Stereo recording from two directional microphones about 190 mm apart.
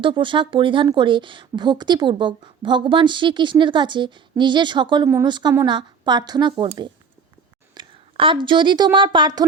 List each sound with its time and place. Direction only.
0.0 s a woman's voice: 25° right (ahead or behind)